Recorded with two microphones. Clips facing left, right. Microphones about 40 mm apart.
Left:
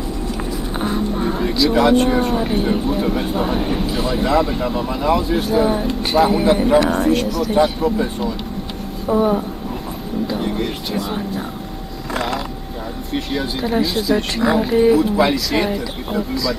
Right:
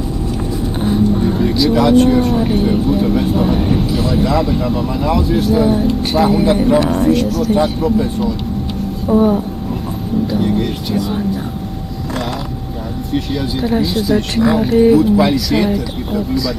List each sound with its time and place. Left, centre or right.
0.7 s music: centre
1.7 s speech: centre
13.1 s speech: centre